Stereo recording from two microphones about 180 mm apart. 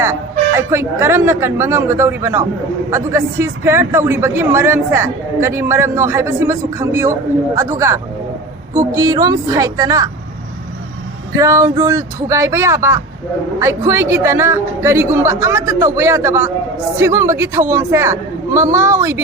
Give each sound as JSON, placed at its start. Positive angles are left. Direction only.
{"t": 0.0, "sound": "a woman's voice", "side_deg": -15}
{"t": 11.3, "sound": "a man's voice", "side_deg": -15}